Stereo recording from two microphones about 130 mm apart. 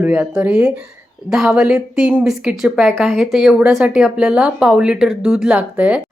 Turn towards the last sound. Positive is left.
turn(degrees=-10)  # may be behind; listen again after turning